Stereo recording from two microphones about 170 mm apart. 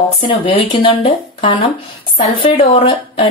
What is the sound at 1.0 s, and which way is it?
Speech, 35° left (ahead or behind).